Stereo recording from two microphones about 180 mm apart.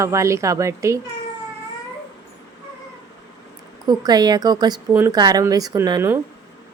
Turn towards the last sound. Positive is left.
turn(degrees=-15)  # may be behind; listen again after turning